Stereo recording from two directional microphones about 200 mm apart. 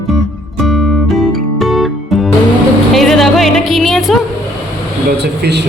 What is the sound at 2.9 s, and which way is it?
Music, centre (ahead or behind).